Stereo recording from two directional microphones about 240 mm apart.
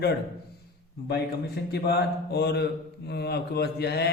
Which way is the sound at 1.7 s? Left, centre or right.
Left.